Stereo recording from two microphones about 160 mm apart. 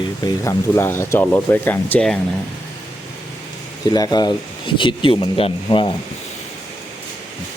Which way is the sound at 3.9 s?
25° left (ahead or behind).